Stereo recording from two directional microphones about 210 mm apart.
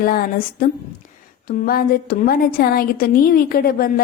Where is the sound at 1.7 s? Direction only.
45° left (ahead or behind).